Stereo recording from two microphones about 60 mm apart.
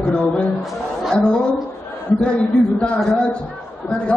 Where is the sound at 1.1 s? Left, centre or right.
Centre.